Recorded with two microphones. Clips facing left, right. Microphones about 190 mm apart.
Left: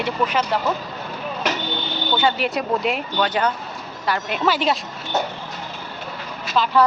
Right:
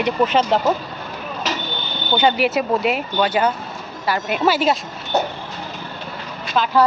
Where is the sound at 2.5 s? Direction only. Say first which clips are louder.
Right 3 dB; 5° right (ahead or behind).